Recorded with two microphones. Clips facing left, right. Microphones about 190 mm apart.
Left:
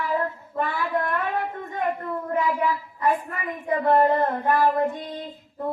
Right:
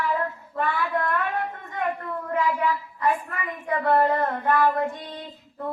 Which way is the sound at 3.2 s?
20° left (ahead or behind).